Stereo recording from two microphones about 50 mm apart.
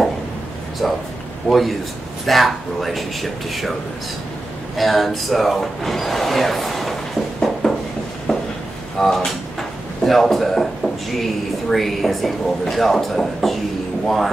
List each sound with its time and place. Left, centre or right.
0.8 s speech: centre
4.7 s speech: centre
8.3 s a sound: centre
8.9 s speech: centre